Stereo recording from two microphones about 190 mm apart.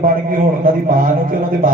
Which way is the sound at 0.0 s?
45° right (ahead or behind).